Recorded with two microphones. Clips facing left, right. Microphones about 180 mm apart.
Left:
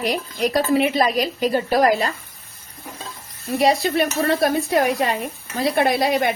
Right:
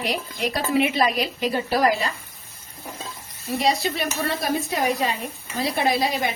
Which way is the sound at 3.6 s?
60° left (ahead or behind).